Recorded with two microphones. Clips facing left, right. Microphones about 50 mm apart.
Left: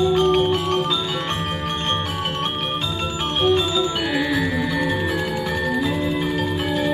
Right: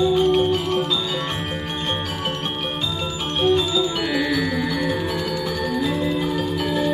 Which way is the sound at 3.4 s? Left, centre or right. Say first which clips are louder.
Even; left.